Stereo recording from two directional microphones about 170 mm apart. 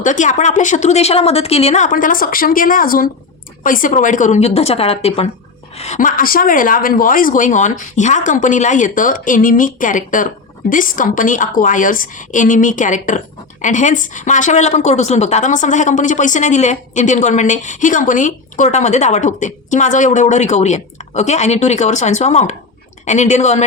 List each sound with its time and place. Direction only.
0.0 s a woman's voice: 45° left (ahead or behind)
5.8 s a woman's voice: 45° left (ahead or behind)